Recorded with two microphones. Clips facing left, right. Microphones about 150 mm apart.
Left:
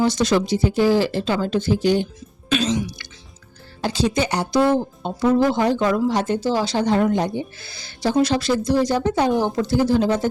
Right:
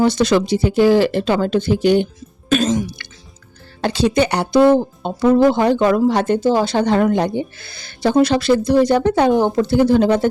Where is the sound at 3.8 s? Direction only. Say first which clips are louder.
Right 5 dB; 65° right (ahead or behind).